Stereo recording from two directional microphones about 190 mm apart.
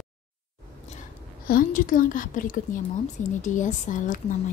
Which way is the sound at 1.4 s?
45° left (ahead or behind).